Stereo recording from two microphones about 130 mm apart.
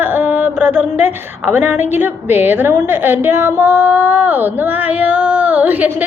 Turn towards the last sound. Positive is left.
turn(degrees=-10)  # may be behind; listen again after turning